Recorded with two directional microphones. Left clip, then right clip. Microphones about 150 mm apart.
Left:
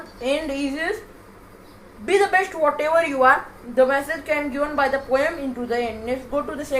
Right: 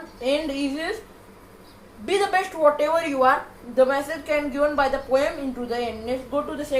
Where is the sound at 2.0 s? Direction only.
5° left (ahead or behind).